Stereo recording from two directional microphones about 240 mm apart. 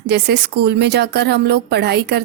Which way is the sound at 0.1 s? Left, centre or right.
Right.